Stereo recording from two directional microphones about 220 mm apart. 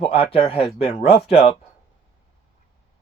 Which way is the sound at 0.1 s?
25° left (ahead or behind).